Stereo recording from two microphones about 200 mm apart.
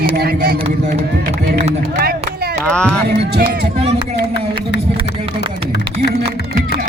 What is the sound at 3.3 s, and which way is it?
Speech, 55° right (ahead or behind).